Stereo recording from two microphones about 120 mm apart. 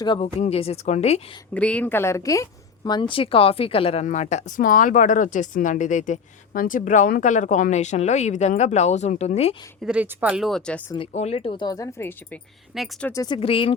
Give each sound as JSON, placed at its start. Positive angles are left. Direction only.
{"t": 0.0, "sound": "speech", "side_deg": 40}
{"t": 0.3, "sound": "speech", "side_deg": 60}
{"t": 1.5, "sound": "speech", "side_deg": 10}
{"t": 4.0, "sound": "speech", "side_deg": 75}
{"t": 9.8, "sound": "speech", "side_deg": -10}
{"t": 10.5, "sound": "speech", "side_deg": 10}
{"t": 11.1, "sound": "speech", "side_deg": 65}
{"t": 11.6, "sound": "speech", "side_deg": 30}
{"t": 12.7, "sound": "speech", "side_deg": 0}
{"t": 13.2, "sound": "speech", "side_deg": 45}